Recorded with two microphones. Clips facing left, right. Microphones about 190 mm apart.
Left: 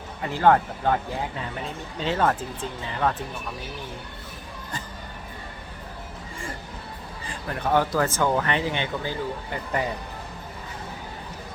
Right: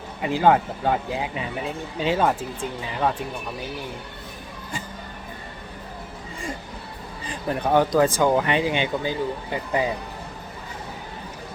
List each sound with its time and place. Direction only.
0.2 s speech: 15° right (ahead or behind)
7.3 s speech: 15° right (ahead or behind)